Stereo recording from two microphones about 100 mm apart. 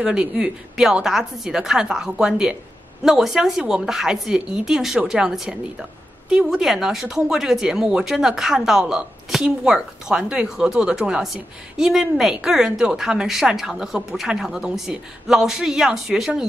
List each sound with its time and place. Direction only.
0.0 s speech: 5° right (ahead or behind)